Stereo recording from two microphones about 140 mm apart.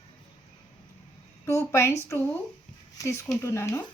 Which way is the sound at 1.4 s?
20° left (ahead or behind).